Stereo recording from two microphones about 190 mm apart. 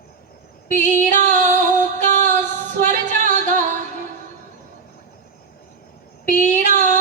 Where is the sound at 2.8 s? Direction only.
45° right (ahead or behind).